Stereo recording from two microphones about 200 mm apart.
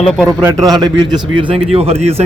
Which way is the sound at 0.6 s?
20° right (ahead or behind).